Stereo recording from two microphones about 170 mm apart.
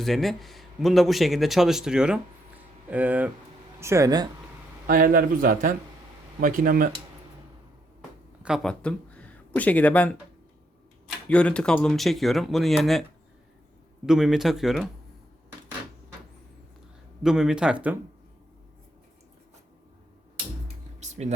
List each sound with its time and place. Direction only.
0.0 s a man's voice: centre (ahead or behind); by 4.3 s 20° right (ahead or behind)
4.9 s a man's voice: 55° right (ahead or behind)
8.4 s speech: centre (ahead or behind)
11.3 s a man's voice: 5° left (ahead or behind)
14.1 s a man's voice: 5° right (ahead or behind)
17.2 s a man's voice: 5° right (ahead or behind)
21.0 s a sound: 40° right (ahead or behind)